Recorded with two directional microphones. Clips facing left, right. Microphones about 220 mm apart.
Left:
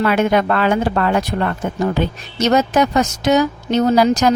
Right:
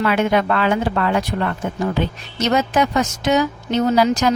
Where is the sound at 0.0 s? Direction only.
45° left (ahead or behind).